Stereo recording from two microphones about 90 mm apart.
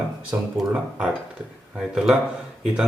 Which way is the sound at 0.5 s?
10° right (ahead or behind).